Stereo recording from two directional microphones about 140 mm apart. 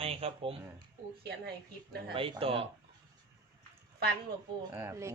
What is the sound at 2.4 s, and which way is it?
Speech, 40° right (ahead or behind).